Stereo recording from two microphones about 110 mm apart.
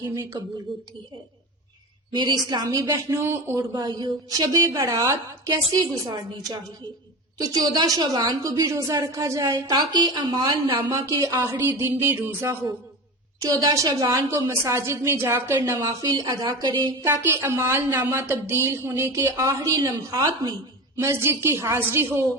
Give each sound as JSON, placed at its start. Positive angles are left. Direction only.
{"t": 0.7, "sound": "a woman's voice", "side_deg": 0}
{"t": 2.1, "sound": "a woman's voice", "side_deg": -45}
{"t": 7.3, "sound": "a woman's voice", "side_deg": -35}
{"t": 13.4, "sound": "a woman's voice", "side_deg": -35}
{"t": 17.0, "sound": "a woman's voice", "side_deg": -25}
{"t": 20.9, "sound": "a woman's voice", "side_deg": -25}